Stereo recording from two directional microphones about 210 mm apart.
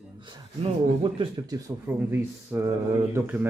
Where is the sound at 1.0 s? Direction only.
25° right (ahead or behind).